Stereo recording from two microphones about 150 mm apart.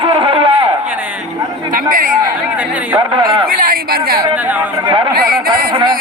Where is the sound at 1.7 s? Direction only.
70° right (ahead or behind).